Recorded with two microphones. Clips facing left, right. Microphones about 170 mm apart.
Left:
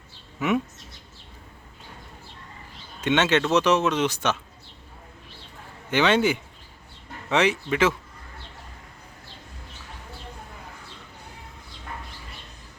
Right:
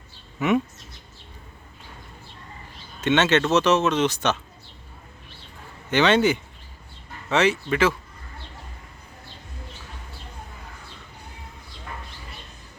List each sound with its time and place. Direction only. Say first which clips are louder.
0.3 s speech: right 3 dB; centre (ahead or behind)
3.0 s speech: right 2 dB; 10° left (ahead or behind)
5.9 s speech: right 2 dB; 10° left (ahead or behind)